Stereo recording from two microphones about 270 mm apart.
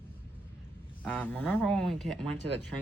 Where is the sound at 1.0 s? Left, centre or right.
Centre.